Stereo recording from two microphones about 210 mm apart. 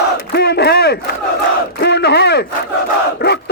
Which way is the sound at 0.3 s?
50° left (ahead or behind).